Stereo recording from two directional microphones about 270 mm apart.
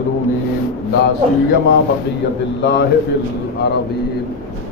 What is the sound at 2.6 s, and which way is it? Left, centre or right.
Speech, left.